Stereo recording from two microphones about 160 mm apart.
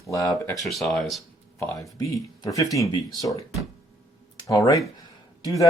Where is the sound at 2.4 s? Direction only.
20° left (ahead or behind).